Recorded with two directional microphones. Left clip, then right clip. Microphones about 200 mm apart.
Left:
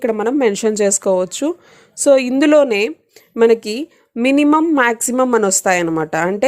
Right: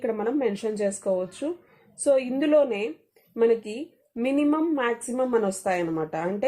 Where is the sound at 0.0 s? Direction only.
35° left (ahead or behind).